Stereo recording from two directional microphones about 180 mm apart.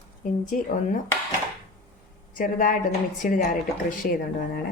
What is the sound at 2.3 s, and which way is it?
A woman's voice, 50° left (ahead or behind).